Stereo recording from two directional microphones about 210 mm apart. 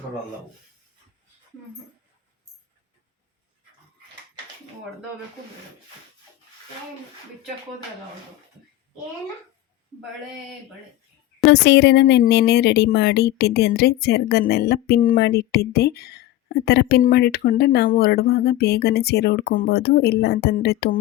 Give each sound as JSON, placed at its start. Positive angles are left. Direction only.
{"t": 11.5, "sound": "speech", "side_deg": 55}